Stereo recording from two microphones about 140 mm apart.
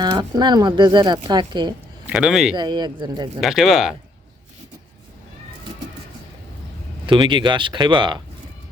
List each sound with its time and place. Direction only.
0.0 s speech: 30° right (ahead or behind)
2.0 s speech: 5° right (ahead or behind)
2.6 s speech: 30° right (ahead or behind)
3.4 s speech: centre (ahead or behind)
7.1 s speech: 35° right (ahead or behind)